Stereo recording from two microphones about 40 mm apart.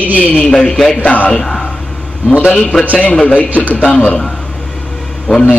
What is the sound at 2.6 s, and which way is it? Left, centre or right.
Speech, left.